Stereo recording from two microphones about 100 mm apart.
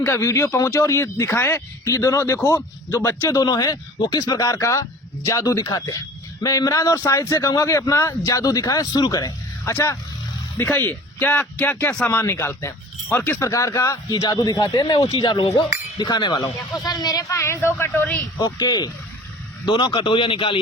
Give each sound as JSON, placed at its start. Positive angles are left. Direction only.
{"t": 0.0, "sound": "speech", "side_deg": 30}
{"t": 9.7, "sound": "speech", "side_deg": 25}
{"t": 16.4, "sound": "speech", "side_deg": 35}
{"t": 18.3, "sound": "speech", "side_deg": 40}
{"t": 19.6, "sound": "speech", "side_deg": 55}